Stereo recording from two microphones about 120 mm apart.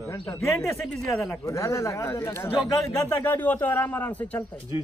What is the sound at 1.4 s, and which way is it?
A man's voice, 25° left (ahead or behind).